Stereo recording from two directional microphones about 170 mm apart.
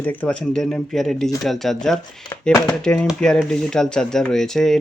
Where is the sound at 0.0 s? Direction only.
10° left (ahead or behind).